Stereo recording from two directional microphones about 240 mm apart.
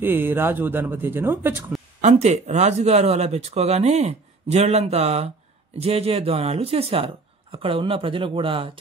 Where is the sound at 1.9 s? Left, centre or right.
Right.